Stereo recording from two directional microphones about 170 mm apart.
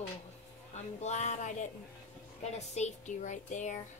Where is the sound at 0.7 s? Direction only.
40° left (ahead or behind).